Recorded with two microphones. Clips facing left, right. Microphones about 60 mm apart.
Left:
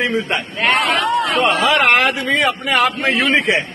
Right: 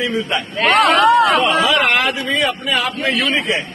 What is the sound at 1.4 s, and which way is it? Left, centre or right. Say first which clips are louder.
A man's voice: left 1 dB; left.